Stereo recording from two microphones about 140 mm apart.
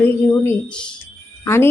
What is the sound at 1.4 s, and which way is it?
Speech, 20° left (ahead or behind).